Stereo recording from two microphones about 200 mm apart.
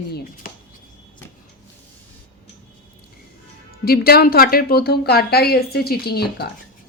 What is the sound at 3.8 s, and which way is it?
A woman's voice, 50° left (ahead or behind).